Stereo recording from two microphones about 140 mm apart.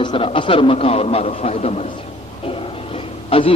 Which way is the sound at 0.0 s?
35° left (ahead or behind).